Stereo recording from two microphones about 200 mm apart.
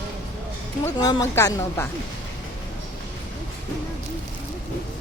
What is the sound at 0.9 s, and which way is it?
Speech, 20° left (ahead or behind).